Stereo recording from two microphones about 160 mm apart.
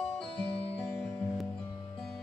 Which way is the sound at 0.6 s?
5° left (ahead or behind).